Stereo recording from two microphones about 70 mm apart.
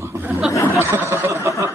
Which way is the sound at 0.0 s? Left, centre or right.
Right.